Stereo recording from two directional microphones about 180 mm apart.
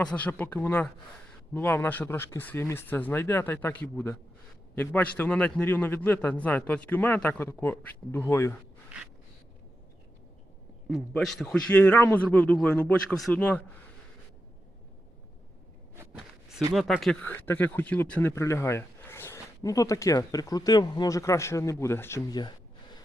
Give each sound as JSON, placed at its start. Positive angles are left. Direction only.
{"t": 0.0, "sound": "speech", "side_deg": 5}
{"t": 10.8, "sound": "speech", "side_deg": 0}
{"t": 16.7, "sound": "speech", "side_deg": 0}